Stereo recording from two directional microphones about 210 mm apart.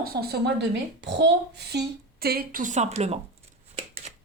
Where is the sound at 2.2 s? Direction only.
45° right (ahead or behind).